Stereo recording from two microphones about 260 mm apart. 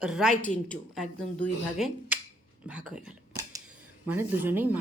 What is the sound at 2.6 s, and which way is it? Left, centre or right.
Whispering, centre.